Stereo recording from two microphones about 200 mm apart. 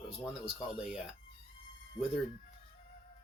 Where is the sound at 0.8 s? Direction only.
Centre (ahead or behind).